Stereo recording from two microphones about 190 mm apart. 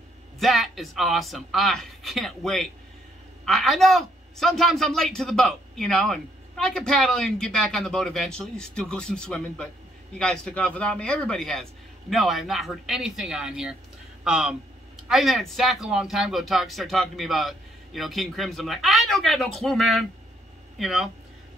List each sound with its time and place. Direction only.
0.4 s a man's voice: centre (ahead or behind)